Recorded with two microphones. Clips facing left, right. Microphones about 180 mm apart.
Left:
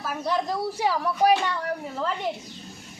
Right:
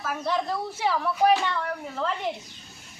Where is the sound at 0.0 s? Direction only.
10° left (ahead or behind).